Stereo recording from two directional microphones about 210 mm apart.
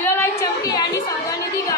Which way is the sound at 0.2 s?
15° left (ahead or behind).